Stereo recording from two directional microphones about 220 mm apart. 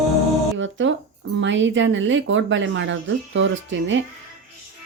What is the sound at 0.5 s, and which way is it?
Speech, 55° right (ahead or behind).